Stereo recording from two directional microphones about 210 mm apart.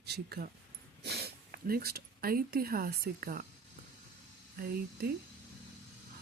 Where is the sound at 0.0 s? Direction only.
50° right (ahead or behind).